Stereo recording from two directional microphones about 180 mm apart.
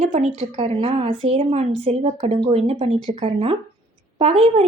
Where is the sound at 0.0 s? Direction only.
40° right (ahead or behind).